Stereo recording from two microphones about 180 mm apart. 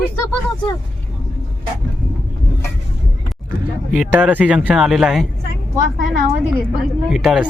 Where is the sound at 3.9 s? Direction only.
5° right (ahead or behind).